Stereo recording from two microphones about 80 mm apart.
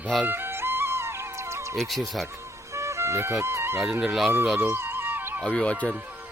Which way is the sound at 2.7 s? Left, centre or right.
Right.